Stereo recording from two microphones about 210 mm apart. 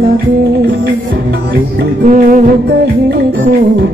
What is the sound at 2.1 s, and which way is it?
Music, 45° right (ahead or behind).